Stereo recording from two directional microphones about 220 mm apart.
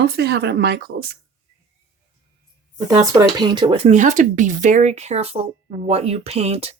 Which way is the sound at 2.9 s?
20° right (ahead or behind).